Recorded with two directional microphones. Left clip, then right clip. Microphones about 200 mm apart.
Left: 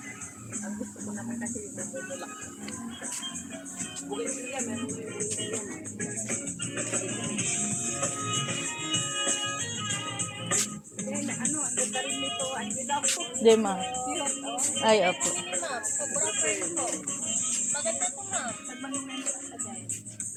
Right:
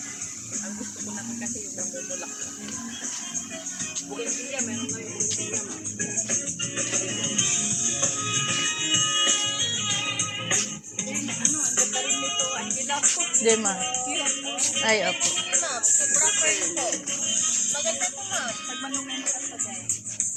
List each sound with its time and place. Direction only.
6.7 s music: 40° right (ahead or behind)
13.4 s speech: 20° left (ahead or behind)
14.1 s music: 25° left (ahead or behind)
16.2 s music: 30° right (ahead or behind)